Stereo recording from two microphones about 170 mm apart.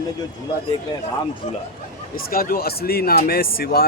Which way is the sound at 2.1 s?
60° left (ahead or behind).